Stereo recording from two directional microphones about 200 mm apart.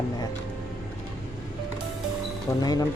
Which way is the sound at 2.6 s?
20° left (ahead or behind).